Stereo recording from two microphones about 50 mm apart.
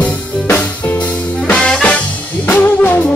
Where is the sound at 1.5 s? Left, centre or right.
Centre.